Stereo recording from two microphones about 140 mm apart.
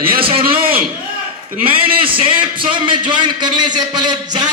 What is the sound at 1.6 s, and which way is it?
A man's voice, 40° right (ahead or behind).